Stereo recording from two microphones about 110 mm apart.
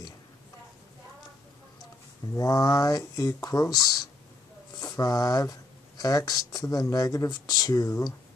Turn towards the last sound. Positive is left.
turn(degrees=35)  # may be behind; listen again after turning